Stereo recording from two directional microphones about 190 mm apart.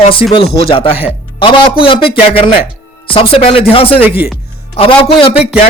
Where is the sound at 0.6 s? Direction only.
30° left (ahead or behind).